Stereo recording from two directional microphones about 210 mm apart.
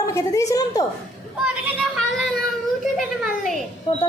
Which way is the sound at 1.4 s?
5° right (ahead or behind).